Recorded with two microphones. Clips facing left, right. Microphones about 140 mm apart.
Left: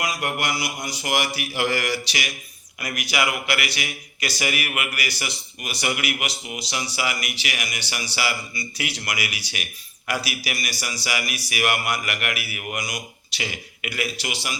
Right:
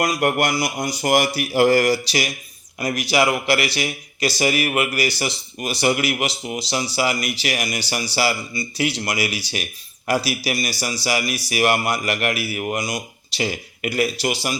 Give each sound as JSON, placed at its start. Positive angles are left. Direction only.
{"t": 0.0, "sound": "speech", "side_deg": -45}